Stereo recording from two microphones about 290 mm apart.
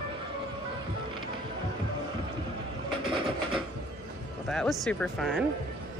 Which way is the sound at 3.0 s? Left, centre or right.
Centre.